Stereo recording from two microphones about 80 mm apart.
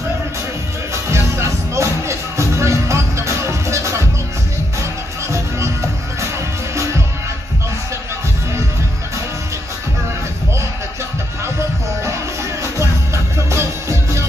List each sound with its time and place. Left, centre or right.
1.1 s music: right
5.3 s music: right
12.7 s music: right